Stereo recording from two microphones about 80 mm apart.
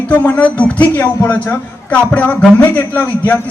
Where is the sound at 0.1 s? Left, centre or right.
Left.